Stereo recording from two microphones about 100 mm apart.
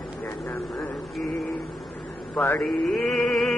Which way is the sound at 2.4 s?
20° left (ahead or behind).